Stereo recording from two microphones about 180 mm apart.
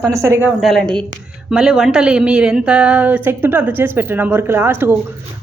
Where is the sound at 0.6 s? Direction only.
Centre (ahead or behind).